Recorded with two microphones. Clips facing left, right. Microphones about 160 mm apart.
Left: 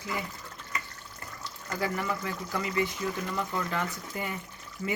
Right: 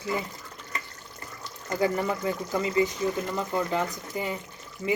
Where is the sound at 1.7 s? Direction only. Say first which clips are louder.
Right 6 dB; 25° right (ahead or behind).